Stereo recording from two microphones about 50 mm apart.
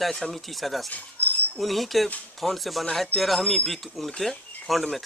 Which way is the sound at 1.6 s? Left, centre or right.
Centre.